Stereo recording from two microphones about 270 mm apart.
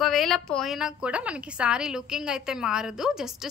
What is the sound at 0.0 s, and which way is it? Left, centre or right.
A woman's voice, centre.